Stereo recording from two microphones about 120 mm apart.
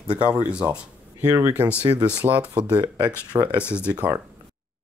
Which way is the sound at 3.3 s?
30° right (ahead or behind).